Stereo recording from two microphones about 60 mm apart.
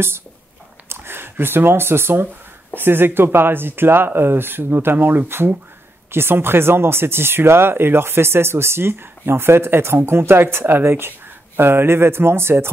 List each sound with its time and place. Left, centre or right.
0.8 s speech: right